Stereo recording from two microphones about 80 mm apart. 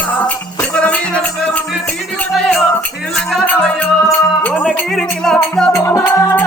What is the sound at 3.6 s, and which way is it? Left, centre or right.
Music, centre.